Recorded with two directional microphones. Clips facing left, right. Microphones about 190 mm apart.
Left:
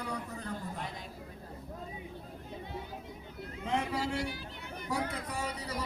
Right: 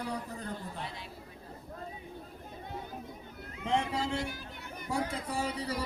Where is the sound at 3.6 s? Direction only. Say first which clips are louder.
Right 2 dB; 25° right (ahead or behind).